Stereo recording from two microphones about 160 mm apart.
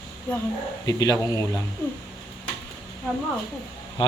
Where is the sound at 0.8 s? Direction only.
20° left (ahead or behind).